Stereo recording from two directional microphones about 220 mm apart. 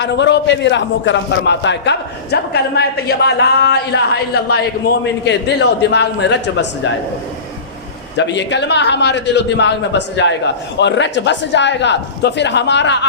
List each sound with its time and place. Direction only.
0.0 s a man's voice: 55° left (ahead or behind)
8.1 s a man's voice: 55° left (ahead or behind)